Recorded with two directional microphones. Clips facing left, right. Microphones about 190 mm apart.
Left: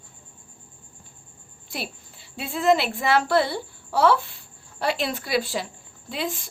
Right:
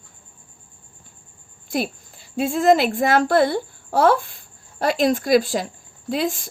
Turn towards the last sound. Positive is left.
turn(degrees=-45)  # may be behind; listen again after turning